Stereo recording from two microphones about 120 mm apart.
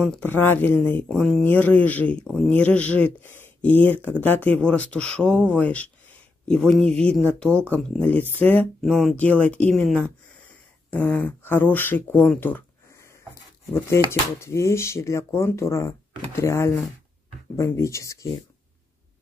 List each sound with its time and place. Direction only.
0.2 s speech: 15° left (ahead or behind)
8.8 s speech: centre (ahead or behind)
9.1 s speech: 10° left (ahead or behind)